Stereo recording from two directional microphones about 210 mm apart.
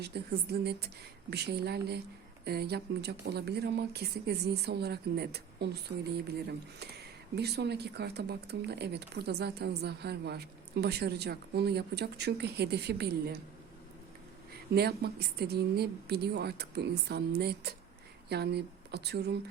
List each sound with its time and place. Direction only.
0.0 s speech: 50° right (ahead or behind)
14.8 s speech: 50° right (ahead or behind)